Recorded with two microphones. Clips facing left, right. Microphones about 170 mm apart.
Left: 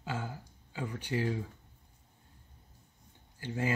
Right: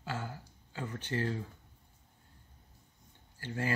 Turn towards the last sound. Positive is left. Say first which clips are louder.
# left 2 dB
turn(degrees=15)  # may be behind; listen again after turning